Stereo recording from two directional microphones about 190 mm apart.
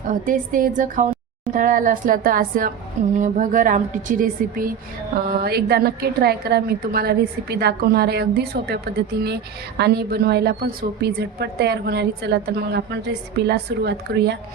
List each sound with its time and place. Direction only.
0.1 s a woman's voice: 45° right (ahead or behind); by 14.3 s 60° right (ahead or behind)